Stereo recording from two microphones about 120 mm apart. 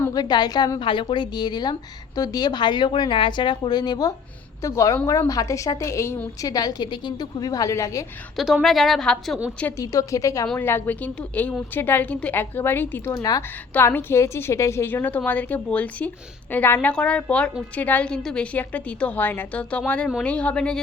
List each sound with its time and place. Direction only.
0.1 s speech: 35° left (ahead or behind)
8.6 s a woman's voice: centre (ahead or behind)
9.7 s a woman's voice: 30° left (ahead or behind); by 20.8 s 5° left (ahead or behind)